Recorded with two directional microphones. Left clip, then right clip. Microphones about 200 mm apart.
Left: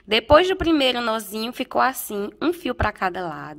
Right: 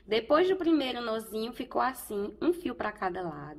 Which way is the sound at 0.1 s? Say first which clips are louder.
Left 9 dB; 40° left (ahead or behind).